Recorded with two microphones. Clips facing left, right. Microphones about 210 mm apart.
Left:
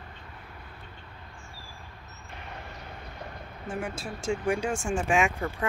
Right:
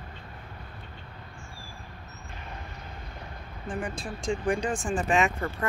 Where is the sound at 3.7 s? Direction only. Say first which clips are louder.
Even; 40° left (ahead or behind).